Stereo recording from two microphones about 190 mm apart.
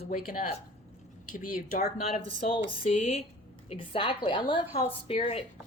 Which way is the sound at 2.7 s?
35° left (ahead or behind).